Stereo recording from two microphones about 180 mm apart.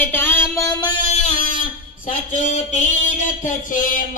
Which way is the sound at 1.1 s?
40° left (ahead or behind).